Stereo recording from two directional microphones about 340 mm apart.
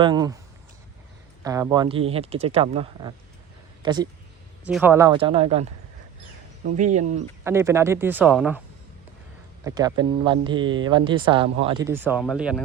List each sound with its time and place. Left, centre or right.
0.0 s speech: centre
1.5 s speech: centre
7.4 s speech: centre
9.6 s speech: centre